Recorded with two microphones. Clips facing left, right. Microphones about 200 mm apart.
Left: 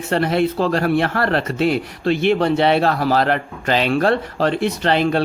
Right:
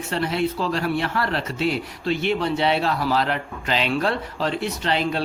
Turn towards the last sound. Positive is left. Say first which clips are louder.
# left 6 dB
turn(degrees=55)  # may be behind; listen again after turning